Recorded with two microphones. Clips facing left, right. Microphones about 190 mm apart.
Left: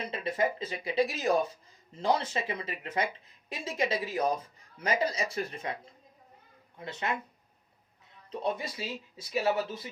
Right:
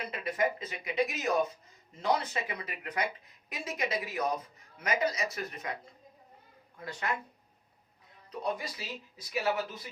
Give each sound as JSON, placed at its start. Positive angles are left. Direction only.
{"t": 0.0, "sound": "speech", "side_deg": 25}
{"t": 6.7, "sound": "speech", "side_deg": 20}
{"t": 8.3, "sound": "speech", "side_deg": 25}